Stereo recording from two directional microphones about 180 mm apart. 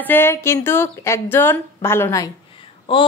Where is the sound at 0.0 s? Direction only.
10° left (ahead or behind).